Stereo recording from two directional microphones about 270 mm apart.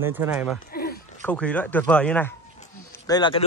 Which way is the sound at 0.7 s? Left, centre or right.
Left.